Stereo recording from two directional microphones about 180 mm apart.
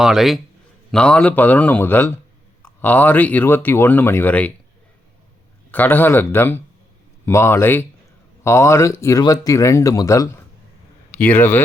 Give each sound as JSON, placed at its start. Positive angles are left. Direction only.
{"t": 0.0, "sound": "a man's voice", "side_deg": 0}
{"t": 5.7, "sound": "speech", "side_deg": 10}